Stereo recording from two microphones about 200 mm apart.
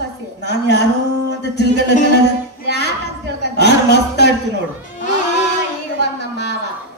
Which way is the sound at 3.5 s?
55° left (ahead or behind).